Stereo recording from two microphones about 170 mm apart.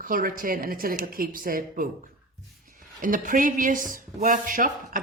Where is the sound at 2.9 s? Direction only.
50° right (ahead or behind).